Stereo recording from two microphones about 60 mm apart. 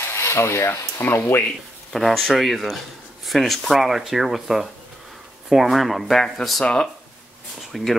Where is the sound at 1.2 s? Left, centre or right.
Left.